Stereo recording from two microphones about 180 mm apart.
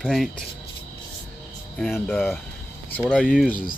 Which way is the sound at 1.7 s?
5° left (ahead or behind).